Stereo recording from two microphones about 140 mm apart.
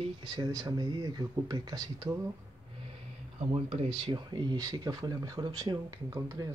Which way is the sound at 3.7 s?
40° right (ahead or behind).